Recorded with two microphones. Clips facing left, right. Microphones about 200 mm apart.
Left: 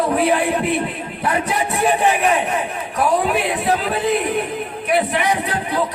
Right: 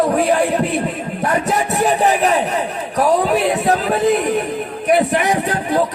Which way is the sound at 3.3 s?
45° right (ahead or behind).